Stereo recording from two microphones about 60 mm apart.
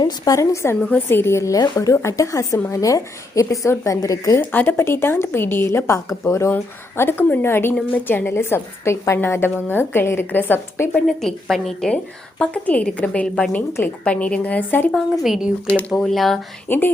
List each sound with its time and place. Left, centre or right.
0.3 s a woman's voice: left
4.4 s a woman's voice: left
6.9 s a woman's voice: left
9.2 s a woman's voice: left
11.0 s a woman's voice: centre
12.4 s a woman's voice: centre
14.9 s a woman's voice: centre
15.6 s a woman's voice: left
15.9 s a woman's voice: centre
16.6 s a woman's voice: left